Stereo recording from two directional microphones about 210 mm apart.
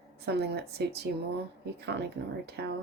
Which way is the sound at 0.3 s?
50° right (ahead or behind).